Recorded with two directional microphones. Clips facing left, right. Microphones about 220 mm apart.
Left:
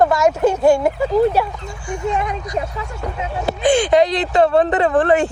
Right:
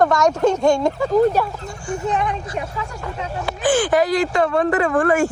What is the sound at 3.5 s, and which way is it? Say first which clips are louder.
Speech: left 3 dB; 25° left (ahead or behind).